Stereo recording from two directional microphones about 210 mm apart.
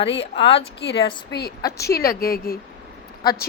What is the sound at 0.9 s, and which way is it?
A woman's voice, 50° left (ahead or behind).